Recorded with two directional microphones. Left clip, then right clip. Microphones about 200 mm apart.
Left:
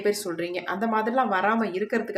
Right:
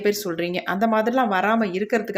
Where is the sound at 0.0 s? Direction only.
30° right (ahead or behind).